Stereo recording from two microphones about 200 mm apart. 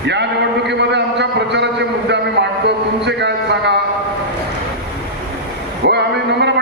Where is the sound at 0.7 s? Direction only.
60° right (ahead or behind).